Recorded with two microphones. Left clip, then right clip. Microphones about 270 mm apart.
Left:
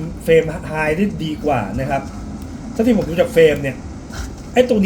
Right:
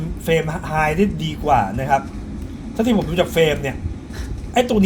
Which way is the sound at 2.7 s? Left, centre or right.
Right.